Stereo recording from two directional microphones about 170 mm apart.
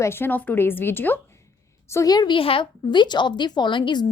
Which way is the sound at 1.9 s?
20° left (ahead or behind).